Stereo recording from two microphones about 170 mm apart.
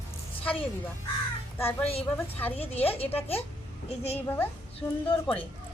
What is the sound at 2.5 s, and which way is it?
Speech, 35° left (ahead or behind).